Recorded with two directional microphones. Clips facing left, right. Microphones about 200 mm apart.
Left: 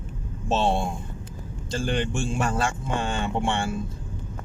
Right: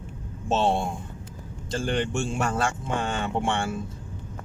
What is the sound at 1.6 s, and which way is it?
Speech, centre (ahead or behind).